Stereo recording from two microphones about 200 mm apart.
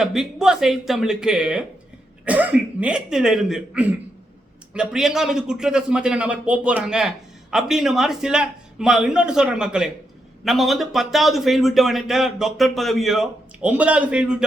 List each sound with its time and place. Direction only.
0.0 s a man's voice: centre (ahead or behind)